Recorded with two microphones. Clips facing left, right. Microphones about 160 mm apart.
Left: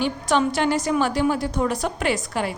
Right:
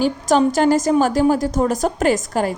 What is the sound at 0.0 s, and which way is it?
A woman's voice, 40° right (ahead or behind).